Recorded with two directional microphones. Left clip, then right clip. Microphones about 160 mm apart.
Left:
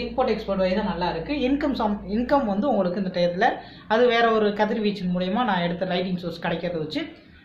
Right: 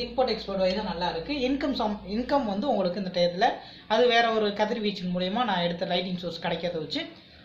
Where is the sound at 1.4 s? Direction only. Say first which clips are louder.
Left 4 dB; 15° right (ahead or behind).